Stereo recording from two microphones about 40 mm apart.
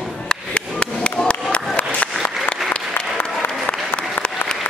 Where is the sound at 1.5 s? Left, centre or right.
Left.